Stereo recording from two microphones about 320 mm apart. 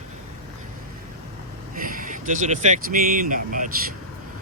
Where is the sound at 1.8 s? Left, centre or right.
Right.